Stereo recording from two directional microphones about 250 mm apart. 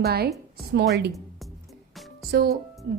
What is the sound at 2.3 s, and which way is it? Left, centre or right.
Speech, right.